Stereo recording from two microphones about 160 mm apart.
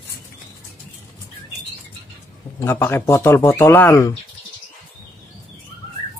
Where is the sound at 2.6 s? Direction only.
15° left (ahead or behind).